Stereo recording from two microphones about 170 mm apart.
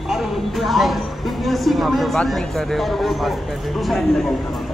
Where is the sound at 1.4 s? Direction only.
Centre (ahead or behind).